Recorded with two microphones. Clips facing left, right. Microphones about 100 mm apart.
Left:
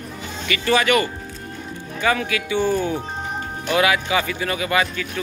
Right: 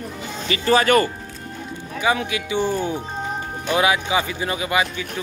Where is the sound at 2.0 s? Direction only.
20° right (ahead or behind).